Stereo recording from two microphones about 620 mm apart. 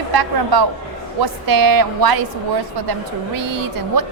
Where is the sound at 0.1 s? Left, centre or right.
Right.